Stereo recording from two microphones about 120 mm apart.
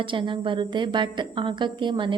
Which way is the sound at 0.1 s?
45° right (ahead or behind).